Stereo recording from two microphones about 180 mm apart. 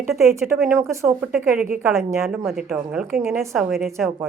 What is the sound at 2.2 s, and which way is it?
A woman's voice, centre (ahead or behind).